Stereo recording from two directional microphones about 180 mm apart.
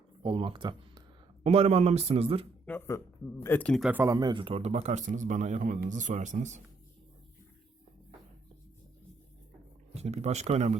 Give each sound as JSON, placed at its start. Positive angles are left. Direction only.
{"t": 0.2, "sound": "speech", "side_deg": -30}
{"t": 2.6, "sound": "speech", "side_deg": 15}
{"t": 3.9, "sound": "a man's voice", "side_deg": -15}
{"t": 9.9, "sound": "speech", "side_deg": -35}